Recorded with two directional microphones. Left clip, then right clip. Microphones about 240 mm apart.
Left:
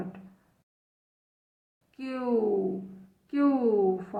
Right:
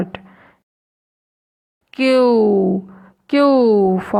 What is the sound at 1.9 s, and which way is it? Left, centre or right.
A woman's voice, right.